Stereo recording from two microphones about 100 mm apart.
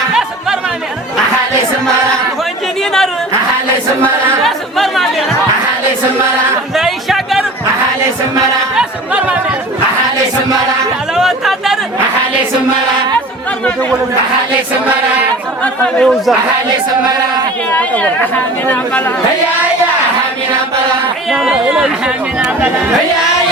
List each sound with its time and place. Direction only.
4.4 s a capella: centre (ahead or behind)
6.7 s music: centre (ahead or behind)
8.7 s music: 10° right (ahead or behind)
11.1 s chatter: 5° right (ahead or behind)
15.6 s speech: 10° left (ahead or behind)
17.7 s speech: 15° left (ahead or behind)
21.2 s speech: 5° right (ahead or behind)